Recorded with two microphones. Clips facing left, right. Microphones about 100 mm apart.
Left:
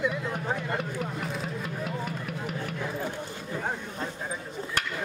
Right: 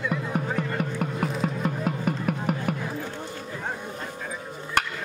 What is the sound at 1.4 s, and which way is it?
Music, 50° right (ahead or behind).